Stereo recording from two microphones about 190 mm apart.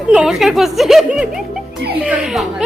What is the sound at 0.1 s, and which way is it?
A child's voice, 5° right (ahead or behind).